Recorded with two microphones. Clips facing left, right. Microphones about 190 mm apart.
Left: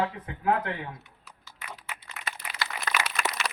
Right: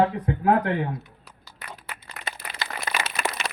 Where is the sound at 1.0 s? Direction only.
35° right (ahead or behind).